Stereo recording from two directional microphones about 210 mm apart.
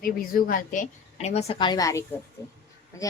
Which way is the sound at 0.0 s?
45° left (ahead or behind).